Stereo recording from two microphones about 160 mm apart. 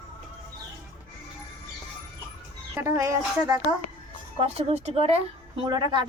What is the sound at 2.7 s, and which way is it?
Speech, 15° right (ahead or behind).